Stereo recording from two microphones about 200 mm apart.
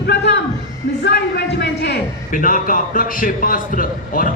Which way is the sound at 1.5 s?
60° left (ahead or behind).